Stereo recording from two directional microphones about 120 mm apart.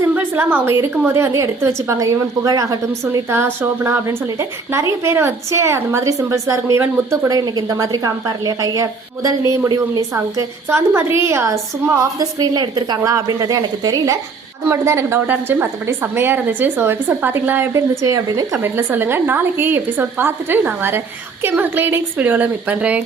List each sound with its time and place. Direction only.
0.1 s a woman's voice: 15° right (ahead or behind)
17.7 s a woman's voice: 30° right (ahead or behind); by 23.0 s 10° right (ahead or behind)